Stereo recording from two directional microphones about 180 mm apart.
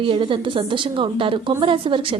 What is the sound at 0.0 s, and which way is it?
A woman's voice, 30° right (ahead or behind).